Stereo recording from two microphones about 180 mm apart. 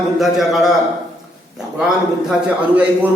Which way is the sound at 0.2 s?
Centre (ahead or behind).